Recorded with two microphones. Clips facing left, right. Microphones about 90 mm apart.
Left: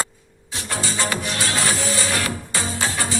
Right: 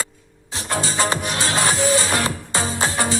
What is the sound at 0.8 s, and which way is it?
Music, 30° right (ahead or behind).